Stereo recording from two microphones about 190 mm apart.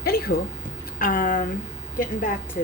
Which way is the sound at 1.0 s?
45° left (ahead or behind).